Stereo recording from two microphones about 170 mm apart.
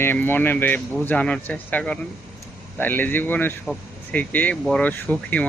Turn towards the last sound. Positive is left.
turn(degrees=10)  # may be behind; listen again after turning